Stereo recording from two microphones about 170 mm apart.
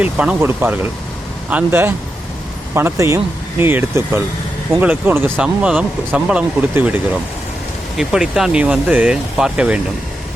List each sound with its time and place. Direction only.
0.0 s speech: 10° right (ahead or behind)